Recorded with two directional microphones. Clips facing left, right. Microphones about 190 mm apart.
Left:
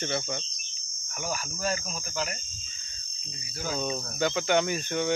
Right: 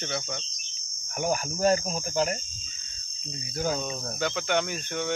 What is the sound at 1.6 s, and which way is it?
Speech, 30° right (ahead or behind).